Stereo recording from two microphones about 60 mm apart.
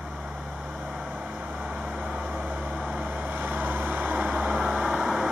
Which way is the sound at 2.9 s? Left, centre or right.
Right.